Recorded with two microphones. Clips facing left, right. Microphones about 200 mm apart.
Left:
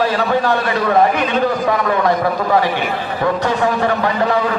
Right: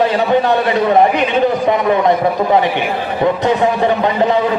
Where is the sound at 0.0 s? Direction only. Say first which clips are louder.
Right 3 dB; 20° right (ahead or behind).